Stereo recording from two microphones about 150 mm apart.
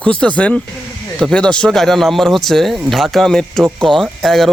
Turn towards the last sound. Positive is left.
turn(degrees=0)  # may be behind; listen again after turning